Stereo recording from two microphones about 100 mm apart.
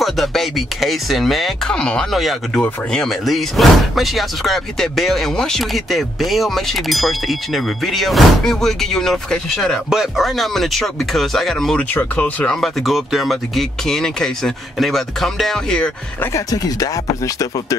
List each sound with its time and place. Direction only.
0.0 s speech: centre (ahead or behind)
11.9 s speech: 15° left (ahead or behind)
16.3 s speech: 35° left (ahead or behind)